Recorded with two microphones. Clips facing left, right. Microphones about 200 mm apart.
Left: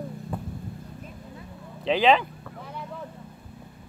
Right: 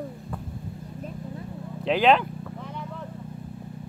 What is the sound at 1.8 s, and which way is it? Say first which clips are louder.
Speech: even; centre (ahead or behind).